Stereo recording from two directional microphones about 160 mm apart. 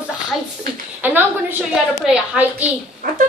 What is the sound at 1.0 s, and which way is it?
A woman's voice, 10° right (ahead or behind).